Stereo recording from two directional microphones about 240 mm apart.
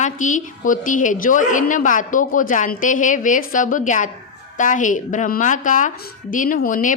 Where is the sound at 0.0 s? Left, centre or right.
Left.